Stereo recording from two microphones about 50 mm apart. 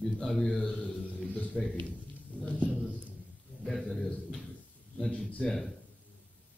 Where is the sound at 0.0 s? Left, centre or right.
Centre.